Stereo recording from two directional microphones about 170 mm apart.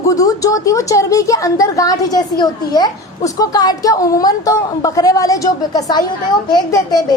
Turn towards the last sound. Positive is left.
turn(degrees=20)  # may be behind; listen again after turning